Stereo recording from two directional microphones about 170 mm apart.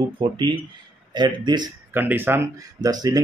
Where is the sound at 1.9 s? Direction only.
10° right (ahead or behind).